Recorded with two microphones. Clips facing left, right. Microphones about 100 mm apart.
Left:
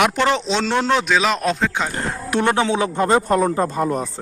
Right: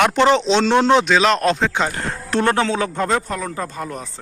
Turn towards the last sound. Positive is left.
turn(degrees=35)  # may be behind; listen again after turning